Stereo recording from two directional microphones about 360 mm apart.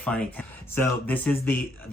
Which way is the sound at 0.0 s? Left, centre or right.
Centre.